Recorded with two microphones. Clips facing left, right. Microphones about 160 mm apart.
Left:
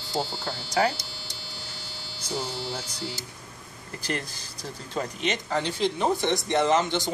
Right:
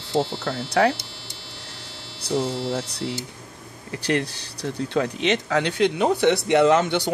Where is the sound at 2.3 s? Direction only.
Centre (ahead or behind).